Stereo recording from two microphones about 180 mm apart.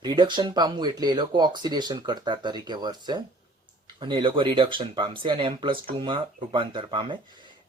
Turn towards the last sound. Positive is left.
turn(degrees=-25)  # may be behind; listen again after turning